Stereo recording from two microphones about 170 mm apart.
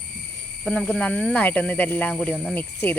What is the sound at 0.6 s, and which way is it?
Speech, 5° left (ahead or behind).